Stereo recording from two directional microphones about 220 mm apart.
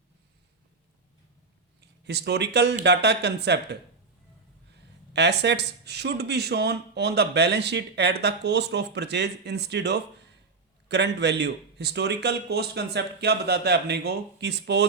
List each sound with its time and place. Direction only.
1.8 s speech: 50° right (ahead or behind)
5.1 s speech: 50° right (ahead or behind)